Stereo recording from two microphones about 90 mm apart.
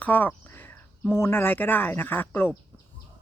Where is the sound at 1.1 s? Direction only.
25° left (ahead or behind).